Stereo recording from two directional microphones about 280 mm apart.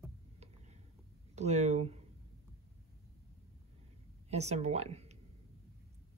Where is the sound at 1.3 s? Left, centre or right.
Right.